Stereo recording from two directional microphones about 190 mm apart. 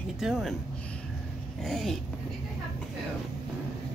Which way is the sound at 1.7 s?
Centre (ahead or behind).